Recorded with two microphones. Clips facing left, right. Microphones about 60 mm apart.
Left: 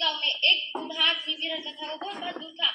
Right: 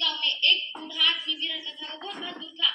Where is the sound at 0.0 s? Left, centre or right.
Left.